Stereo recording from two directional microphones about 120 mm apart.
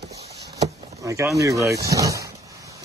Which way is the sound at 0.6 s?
25° right (ahead or behind).